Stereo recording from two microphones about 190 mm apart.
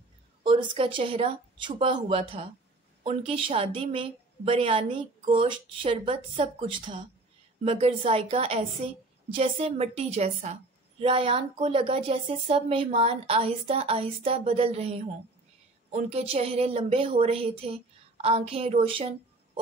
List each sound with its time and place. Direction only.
0.4 s a woman's voice: 25° right (ahead or behind)